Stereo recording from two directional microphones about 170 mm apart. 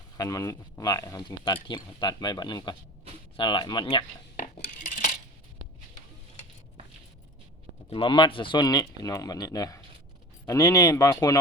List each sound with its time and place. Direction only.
0.2 s speech: 20° left (ahead or behind)
4.4 s cutlery: 55° left (ahead or behind)
7.9 s speech: 30° left (ahead or behind)